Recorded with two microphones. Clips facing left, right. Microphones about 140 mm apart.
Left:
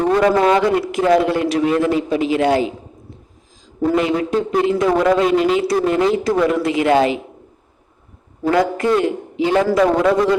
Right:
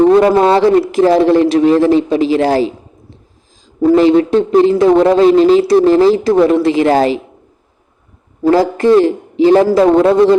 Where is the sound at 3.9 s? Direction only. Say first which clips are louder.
Right 9 dB; 30° right (ahead or behind).